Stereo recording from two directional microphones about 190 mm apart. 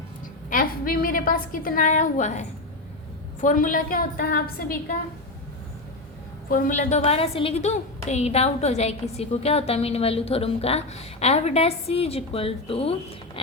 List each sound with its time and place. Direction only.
0.5 s a woman's voice: 50° left (ahead or behind)
6.5 s a woman's voice: 40° left (ahead or behind)